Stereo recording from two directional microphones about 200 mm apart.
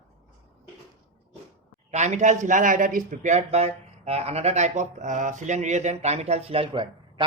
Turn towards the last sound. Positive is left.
turn(degrees=-25)  # may be behind; listen again after turning